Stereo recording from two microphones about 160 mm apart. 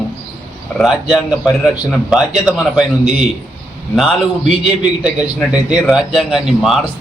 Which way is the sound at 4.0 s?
Centre (ahead or behind).